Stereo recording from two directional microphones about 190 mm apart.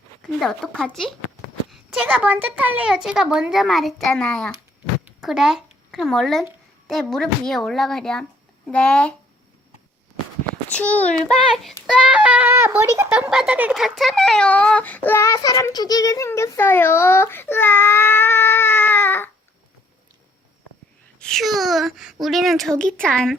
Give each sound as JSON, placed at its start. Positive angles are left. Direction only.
{"t": 0.2, "sound": "a woman's voice", "side_deg": 0}
{"t": 1.9, "sound": "a woman's voice", "side_deg": -10}
{"t": 10.7, "sound": "a child's voice", "side_deg": 5}
{"t": 21.2, "sound": "a woman's voice", "side_deg": 5}